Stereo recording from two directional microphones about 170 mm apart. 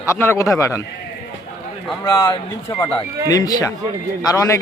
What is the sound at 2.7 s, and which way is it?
A man's voice, 15° left (ahead or behind).